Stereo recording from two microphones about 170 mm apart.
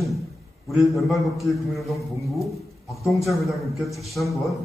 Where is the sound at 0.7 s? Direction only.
Centre (ahead or behind).